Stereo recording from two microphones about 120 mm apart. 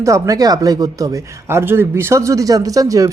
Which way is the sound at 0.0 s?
25° right (ahead or behind).